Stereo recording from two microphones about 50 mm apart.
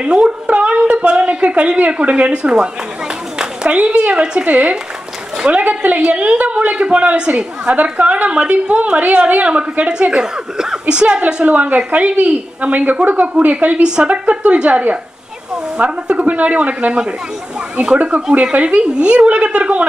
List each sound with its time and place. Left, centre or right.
0.0 s a woman's voice: centre